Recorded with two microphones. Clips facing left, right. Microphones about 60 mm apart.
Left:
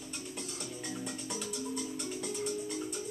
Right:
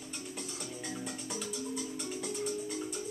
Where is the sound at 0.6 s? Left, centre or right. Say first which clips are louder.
Left 1 dB; centre.